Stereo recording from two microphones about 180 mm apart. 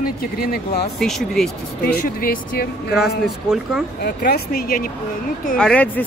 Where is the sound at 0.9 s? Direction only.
Centre (ahead or behind).